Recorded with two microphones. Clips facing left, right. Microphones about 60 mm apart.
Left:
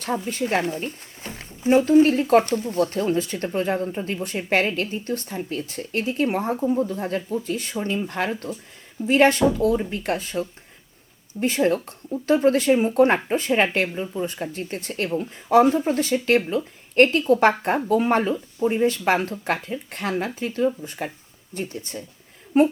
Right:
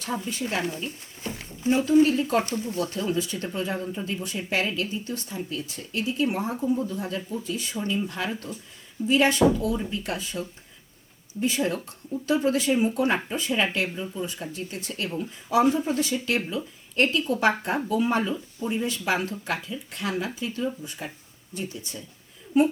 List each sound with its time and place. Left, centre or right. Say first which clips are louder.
0.1 s a woman's voice: left 4 dB; centre
0.6 s speech: left 4 dB; left
13.8 s speech: left 4 dB; left